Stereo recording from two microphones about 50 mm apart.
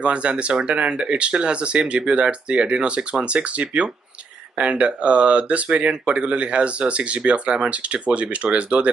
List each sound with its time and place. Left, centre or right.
0.0 s speech: right